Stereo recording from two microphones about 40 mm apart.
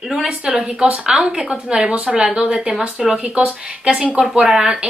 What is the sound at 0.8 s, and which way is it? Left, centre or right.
Speech, right.